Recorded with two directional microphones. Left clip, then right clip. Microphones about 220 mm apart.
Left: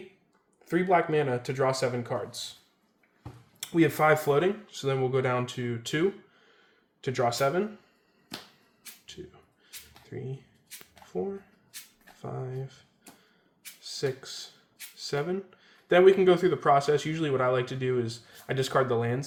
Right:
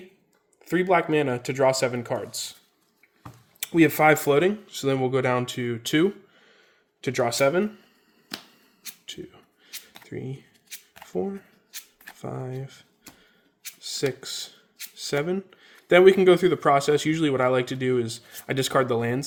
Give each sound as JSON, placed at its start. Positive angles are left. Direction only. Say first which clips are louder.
{"t": 0.6, "sound": "speech", "louder": "right 3 dB", "side_deg": -45}
{"t": 3.6, "sound": "speech", "louder": "right 5 dB", "side_deg": -40}
{"t": 10.1, "sound": "speech", "louder": "right 4 dB", "side_deg": -45}
{"t": 11.0, "sound": "a sound", "louder": "right 4 dB", "side_deg": -45}
{"t": 12.1, "sound": "speech", "louder": "right 3 dB", "side_deg": -45}
{"t": 13.8, "sound": "speech", "louder": "right 4 dB", "side_deg": -45}